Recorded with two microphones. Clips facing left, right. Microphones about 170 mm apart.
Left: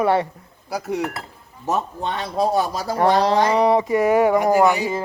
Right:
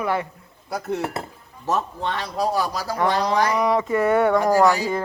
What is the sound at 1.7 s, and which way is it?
Speech, 20° left (ahead or behind).